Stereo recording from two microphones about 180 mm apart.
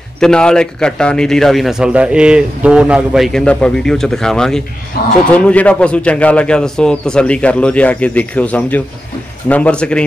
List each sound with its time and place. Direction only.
0.2 s a man's voice: 5° left (ahead or behind)
4.9 s speech: 60° left (ahead or behind)
5.3 s a man's voice: 10° left (ahead or behind)